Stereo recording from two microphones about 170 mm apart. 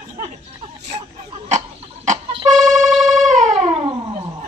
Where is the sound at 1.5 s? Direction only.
40° right (ahead or behind).